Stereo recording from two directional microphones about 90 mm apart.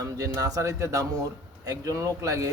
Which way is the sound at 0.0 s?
40° right (ahead or behind).